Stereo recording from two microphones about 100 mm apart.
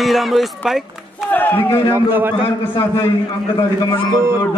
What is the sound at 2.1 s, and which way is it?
Speech, 20° right (ahead or behind).